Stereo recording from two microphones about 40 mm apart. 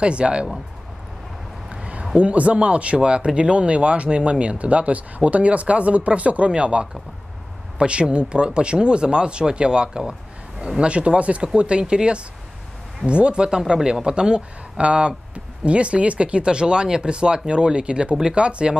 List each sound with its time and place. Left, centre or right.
0.0 s speech: right
1.7 s a sound: right
2.1 s speech: right